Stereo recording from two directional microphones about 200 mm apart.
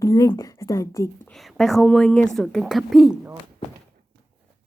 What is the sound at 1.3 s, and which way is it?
A woman's voice, centre (ahead or behind).